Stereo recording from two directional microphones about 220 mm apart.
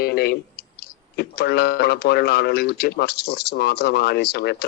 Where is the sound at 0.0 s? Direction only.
45° left (ahead or behind).